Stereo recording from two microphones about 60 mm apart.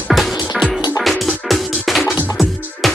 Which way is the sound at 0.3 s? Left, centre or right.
Centre.